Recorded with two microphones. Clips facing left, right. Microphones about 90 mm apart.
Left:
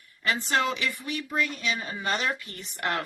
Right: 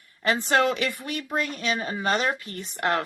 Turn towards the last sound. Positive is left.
turn(degrees=-35)  # may be behind; listen again after turning